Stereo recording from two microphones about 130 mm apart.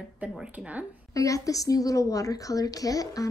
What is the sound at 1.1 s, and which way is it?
A woman's voice, 25° left (ahead or behind).